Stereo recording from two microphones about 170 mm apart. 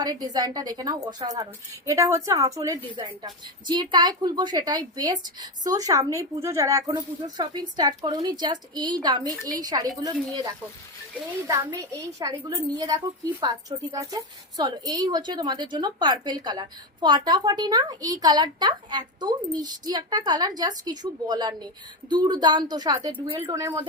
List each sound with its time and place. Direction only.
0.0 s a woman's voice: 25° right (ahead or behind)